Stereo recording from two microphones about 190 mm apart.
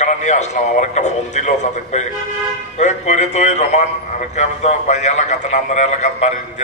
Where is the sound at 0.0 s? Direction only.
40° left (ahead or behind).